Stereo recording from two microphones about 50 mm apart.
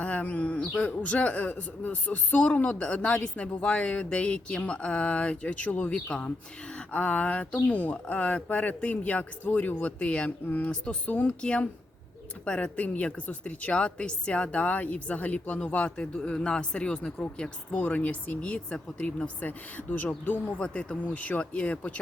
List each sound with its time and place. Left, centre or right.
0.0 s a woman's voice: left